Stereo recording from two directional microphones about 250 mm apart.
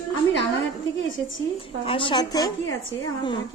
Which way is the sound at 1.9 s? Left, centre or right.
Centre.